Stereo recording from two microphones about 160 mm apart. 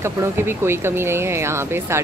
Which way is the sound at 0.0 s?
15° right (ahead or behind).